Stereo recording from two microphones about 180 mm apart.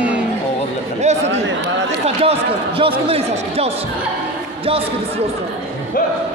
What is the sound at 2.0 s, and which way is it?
Speech, 35° right (ahead or behind).